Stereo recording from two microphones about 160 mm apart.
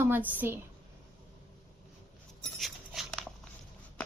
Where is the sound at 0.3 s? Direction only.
10° right (ahead or behind).